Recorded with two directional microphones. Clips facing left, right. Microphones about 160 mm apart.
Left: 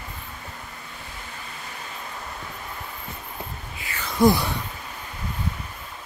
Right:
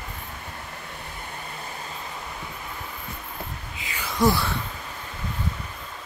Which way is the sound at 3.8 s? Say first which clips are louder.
Even; 15° right (ahead or behind).